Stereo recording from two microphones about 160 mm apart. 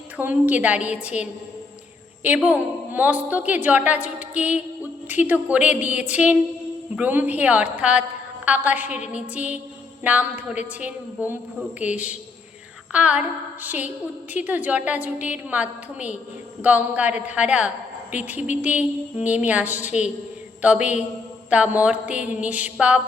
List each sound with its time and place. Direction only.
0.2 s a woman's voice: 10° right (ahead or behind)
2.2 s a woman's voice: 10° right (ahead or behind)